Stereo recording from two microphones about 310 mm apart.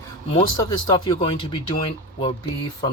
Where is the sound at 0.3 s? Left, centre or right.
Centre.